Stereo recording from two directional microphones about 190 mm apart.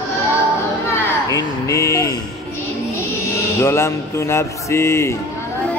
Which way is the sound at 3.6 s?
15° left (ahead or behind).